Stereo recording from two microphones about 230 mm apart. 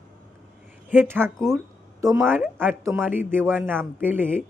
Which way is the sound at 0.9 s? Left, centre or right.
Centre.